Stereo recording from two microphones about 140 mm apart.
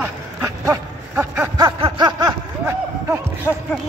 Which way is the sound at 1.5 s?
35° right (ahead or behind).